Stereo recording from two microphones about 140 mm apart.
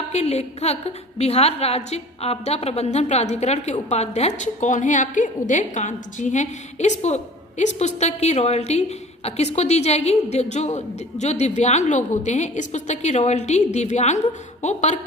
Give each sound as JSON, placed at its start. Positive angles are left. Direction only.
{"t": 0.1, "sound": "a woman's voice", "side_deg": 50}